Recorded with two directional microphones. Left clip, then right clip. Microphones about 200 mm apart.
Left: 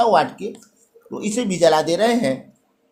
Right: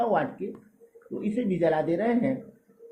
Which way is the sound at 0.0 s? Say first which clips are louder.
Left 10 dB; 30° left (ahead or behind).